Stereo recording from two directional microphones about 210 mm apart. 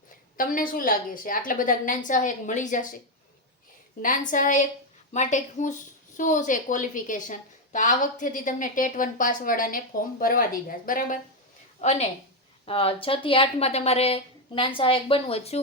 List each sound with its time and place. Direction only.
0.3 s a woman's voice: 40° left (ahead or behind)
4.0 s a woman's voice: 40° left (ahead or behind)